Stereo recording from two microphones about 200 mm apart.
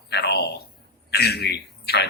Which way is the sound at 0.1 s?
55° left (ahead or behind).